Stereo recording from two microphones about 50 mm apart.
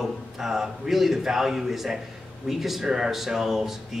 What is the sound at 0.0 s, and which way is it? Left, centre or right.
A woman's voice, centre.